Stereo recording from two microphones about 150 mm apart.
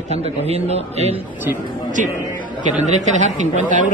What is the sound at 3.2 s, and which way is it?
Speech, 55° right (ahead or behind).